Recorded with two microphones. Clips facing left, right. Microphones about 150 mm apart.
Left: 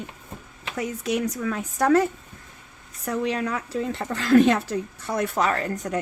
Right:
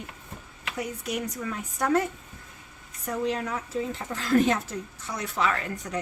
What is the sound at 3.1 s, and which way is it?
Speech, 75° left (ahead or behind).